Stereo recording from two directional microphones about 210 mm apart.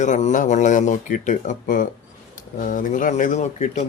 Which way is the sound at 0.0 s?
35° left (ahead or behind).